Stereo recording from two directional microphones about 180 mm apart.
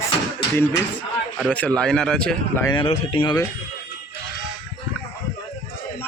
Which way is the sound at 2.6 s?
30° left (ahead or behind).